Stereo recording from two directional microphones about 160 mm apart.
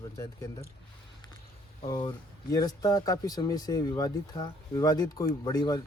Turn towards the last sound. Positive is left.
turn(degrees=25)  # may be behind; listen again after turning